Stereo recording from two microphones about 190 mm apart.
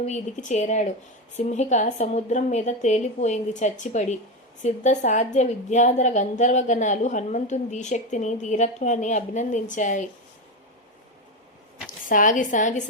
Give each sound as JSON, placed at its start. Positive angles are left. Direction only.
{"t": 0.0, "sound": "a woman's voice", "side_deg": 35}
{"t": 12.0, "sound": "a woman's voice", "side_deg": 45}